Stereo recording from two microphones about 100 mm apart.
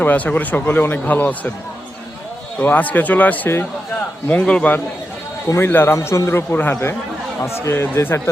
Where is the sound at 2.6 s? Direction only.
15° left (ahead or behind).